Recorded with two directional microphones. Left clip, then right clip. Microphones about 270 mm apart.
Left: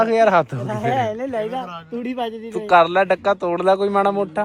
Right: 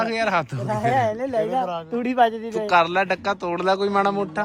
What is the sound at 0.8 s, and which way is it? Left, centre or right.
Speech, centre.